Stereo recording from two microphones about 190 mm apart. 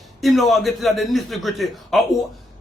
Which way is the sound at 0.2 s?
Centre (ahead or behind).